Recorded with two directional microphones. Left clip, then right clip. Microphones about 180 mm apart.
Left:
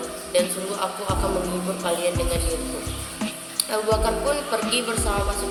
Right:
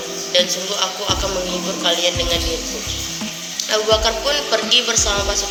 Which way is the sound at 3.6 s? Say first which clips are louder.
Right 7 dB; 10° left (ahead or behind).